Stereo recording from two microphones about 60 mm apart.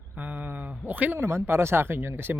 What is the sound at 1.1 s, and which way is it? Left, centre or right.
Speech, right.